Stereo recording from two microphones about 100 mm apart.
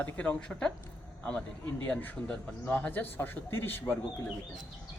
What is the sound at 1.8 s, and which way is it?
A man's voice, 15° left (ahead or behind).